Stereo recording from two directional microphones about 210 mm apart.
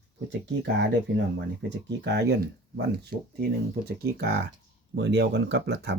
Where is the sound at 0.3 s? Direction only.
55° right (ahead or behind).